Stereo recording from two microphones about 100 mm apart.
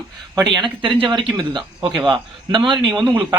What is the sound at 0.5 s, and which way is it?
Speech, 55° right (ahead or behind).